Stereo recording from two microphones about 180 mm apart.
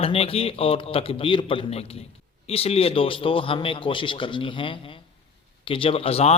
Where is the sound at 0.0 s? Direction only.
30° left (ahead or behind).